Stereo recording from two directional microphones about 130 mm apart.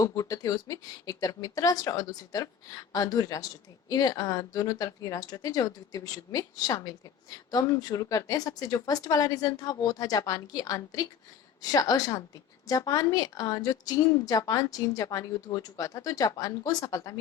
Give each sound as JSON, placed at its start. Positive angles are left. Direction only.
{"t": 0.0, "sound": "a woman's voice", "side_deg": 25}